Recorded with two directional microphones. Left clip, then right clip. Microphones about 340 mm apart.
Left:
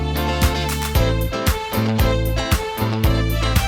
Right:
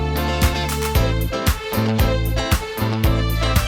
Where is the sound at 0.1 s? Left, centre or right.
Centre.